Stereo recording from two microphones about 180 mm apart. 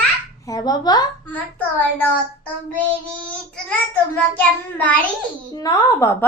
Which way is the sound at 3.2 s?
5° left (ahead or behind).